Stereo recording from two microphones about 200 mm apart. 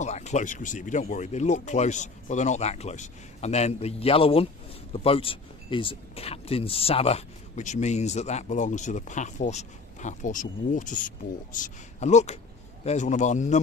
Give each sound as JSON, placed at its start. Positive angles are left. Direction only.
{"t": 0.0, "sound": "speech", "side_deg": 35}